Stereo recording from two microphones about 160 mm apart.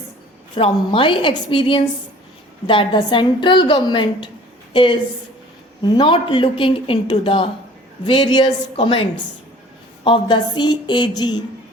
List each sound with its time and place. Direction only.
0.5 s a woman's voice: 30° left (ahead or behind)